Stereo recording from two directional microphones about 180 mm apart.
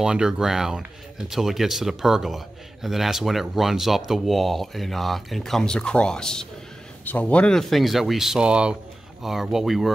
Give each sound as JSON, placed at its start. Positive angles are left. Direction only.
{"t": 0.0, "sound": "a man's voice", "side_deg": -5}